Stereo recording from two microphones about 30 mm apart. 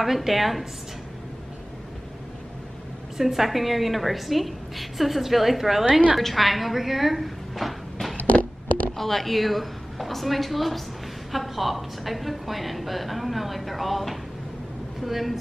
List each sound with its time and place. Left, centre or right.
0.0 s a woman's voice: centre
3.2 s a woman's voice: centre
8.2 s a sound: left
8.9 s a woman's voice: centre